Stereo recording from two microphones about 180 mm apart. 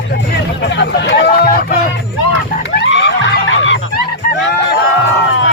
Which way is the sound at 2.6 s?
85° left.